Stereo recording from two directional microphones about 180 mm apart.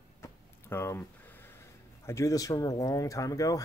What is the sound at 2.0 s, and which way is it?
Speech, 15° left (ahead or behind).